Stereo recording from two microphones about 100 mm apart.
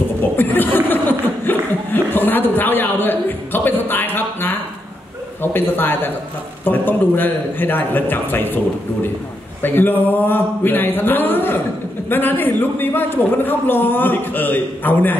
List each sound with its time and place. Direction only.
0.4 s chuckle: 20° left (ahead or behind)
5.4 s a man's voice: 20° left (ahead or behind)
9.6 s a man's voice: 20° left (ahead or behind)